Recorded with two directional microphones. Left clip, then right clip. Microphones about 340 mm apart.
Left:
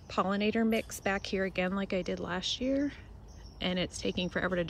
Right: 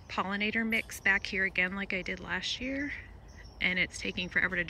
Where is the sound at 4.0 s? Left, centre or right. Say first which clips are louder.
Left 1 dB; centre.